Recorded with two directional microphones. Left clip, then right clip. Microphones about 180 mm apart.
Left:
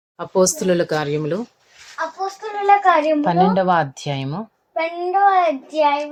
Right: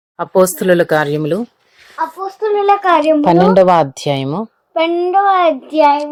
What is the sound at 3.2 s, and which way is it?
Speech, 25° right (ahead or behind).